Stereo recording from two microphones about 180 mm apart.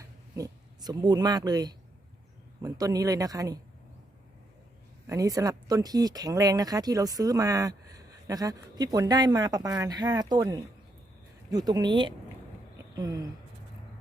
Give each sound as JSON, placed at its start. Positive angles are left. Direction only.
{"t": 0.0, "sound": "speech", "side_deg": -20}
{"t": 5.0, "sound": "speech", "side_deg": -20}